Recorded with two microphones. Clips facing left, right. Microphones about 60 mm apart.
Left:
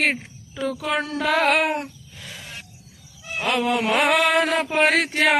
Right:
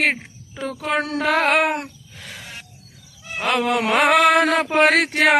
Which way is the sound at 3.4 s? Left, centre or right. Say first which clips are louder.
Right 2 dB; right.